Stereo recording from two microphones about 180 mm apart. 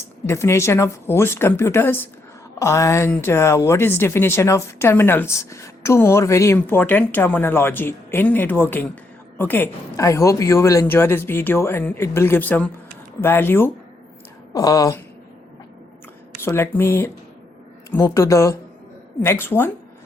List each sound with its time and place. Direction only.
0.3 s a woman's voice: 15° left (ahead or behind)
16.4 s a woman's voice: 15° left (ahead or behind)